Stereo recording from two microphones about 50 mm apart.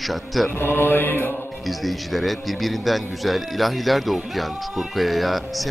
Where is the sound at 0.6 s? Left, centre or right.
Left.